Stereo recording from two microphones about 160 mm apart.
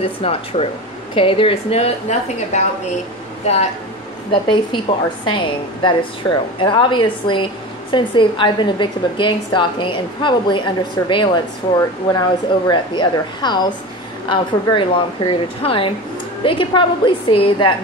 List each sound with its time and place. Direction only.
0.2 s a woman's voice: 40° left (ahead or behind)
4.3 s a woman's voice: 30° left (ahead or behind)